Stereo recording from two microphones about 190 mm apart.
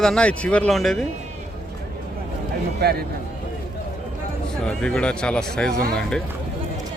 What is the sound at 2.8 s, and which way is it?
Speech, 55° right (ahead or behind).